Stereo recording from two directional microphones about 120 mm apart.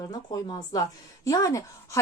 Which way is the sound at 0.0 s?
35° left (ahead or behind).